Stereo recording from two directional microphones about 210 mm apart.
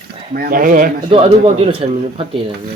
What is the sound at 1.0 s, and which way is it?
Speech, 30° right (ahead or behind).